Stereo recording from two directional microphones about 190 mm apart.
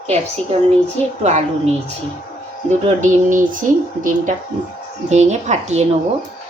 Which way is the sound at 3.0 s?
40° right (ahead or behind).